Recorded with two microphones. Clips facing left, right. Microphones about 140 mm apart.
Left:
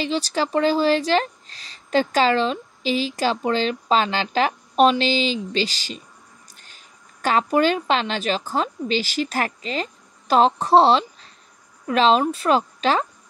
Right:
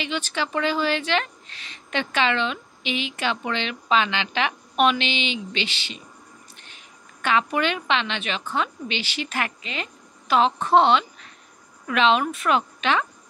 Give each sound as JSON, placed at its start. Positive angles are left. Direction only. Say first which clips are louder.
{"t": 0.0, "sound": "a woman's voice", "louder": "left 5 dB", "side_deg": 35}